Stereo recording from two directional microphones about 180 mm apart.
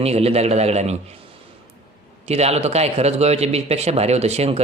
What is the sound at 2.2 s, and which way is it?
Speech, 35° right (ahead or behind).